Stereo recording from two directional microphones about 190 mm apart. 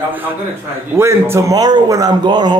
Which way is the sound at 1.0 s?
15° right (ahead or behind).